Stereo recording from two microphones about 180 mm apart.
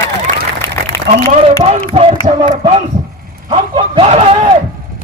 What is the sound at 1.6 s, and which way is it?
Speech, 40° right (ahead or behind).